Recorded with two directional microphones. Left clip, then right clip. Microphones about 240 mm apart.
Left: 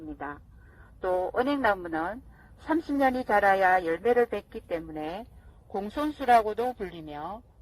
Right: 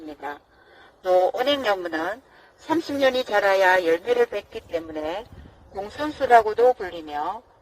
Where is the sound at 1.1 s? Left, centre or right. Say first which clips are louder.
Right 8 dB; left.